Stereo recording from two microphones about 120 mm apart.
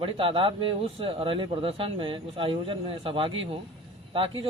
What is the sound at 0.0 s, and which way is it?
Speech, 50° right (ahead or behind).